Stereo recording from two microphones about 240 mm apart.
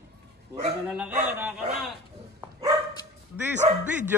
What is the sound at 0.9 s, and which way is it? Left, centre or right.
Speech, centre.